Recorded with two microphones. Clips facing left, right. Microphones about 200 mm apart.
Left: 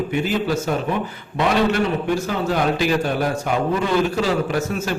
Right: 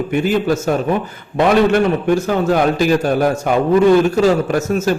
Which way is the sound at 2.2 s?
45° right (ahead or behind).